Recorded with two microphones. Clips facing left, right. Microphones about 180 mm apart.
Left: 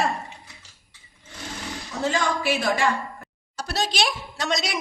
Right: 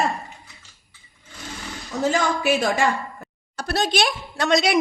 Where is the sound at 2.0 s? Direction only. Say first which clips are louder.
Right 3 dB; 40° right (ahead or behind).